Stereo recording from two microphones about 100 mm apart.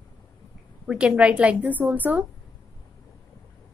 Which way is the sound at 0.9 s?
10° right (ahead or behind).